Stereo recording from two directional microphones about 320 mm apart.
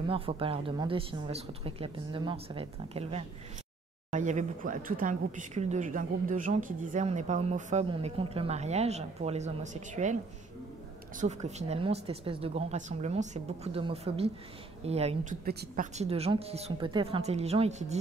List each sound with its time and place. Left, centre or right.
0.0 s speech: centre
11.1 s speech: right